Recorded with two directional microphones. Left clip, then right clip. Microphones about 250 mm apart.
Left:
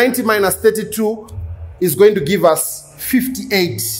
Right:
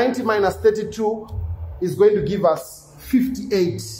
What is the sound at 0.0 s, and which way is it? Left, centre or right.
Speech, left.